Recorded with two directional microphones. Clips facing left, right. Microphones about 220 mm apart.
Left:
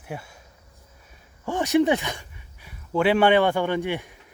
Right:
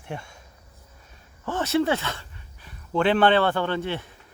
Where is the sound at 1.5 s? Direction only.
15° left (ahead or behind).